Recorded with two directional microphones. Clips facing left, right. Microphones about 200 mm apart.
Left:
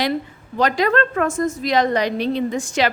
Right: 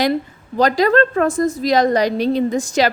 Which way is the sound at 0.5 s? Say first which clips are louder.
Right 4 dB; 35° right (ahead or behind).